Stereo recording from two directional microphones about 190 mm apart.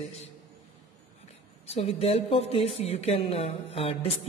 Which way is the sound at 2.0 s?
30° left (ahead or behind).